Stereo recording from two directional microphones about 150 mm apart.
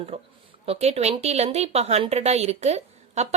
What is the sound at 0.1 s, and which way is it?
Speech, 40° right (ahead or behind).